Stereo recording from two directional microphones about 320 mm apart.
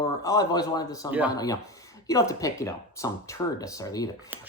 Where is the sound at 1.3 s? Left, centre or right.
Centre.